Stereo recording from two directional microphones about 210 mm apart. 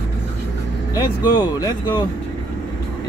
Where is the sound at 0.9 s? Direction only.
20° left (ahead or behind).